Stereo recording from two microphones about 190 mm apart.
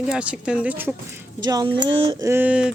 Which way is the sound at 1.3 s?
20° right (ahead or behind).